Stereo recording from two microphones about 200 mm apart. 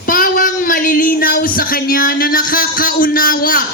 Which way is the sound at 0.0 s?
45° left (ahead or behind).